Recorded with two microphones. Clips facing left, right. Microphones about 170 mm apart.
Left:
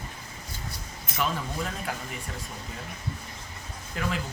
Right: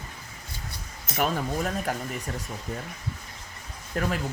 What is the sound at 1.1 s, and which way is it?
Speech, 50° right (ahead or behind).